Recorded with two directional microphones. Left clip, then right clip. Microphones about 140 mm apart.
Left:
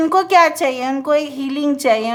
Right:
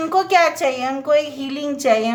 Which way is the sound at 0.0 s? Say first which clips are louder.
Left 3 dB; 40° left (ahead or behind).